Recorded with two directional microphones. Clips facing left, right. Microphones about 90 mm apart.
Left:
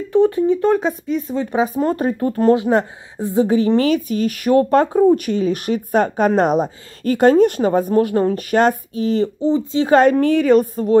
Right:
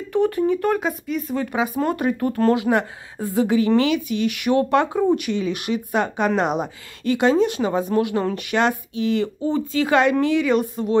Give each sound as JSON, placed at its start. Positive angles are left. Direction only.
{"t": 0.1, "sound": "a woman's voice", "side_deg": 25}
{"t": 9.5, "sound": "speech", "side_deg": 25}
{"t": 9.9, "sound": "a woman's voice", "side_deg": 40}